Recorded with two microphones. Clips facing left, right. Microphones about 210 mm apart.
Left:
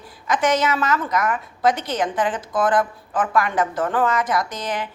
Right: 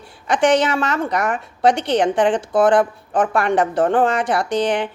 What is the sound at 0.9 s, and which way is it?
Speech, 30° right (ahead or behind).